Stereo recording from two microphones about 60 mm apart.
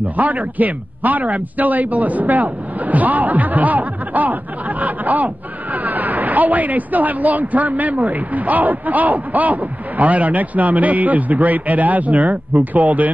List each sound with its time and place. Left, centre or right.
0.1 s speech: right